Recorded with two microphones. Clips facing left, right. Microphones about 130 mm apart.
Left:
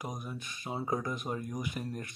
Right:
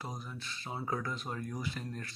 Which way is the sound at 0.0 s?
15° left (ahead or behind).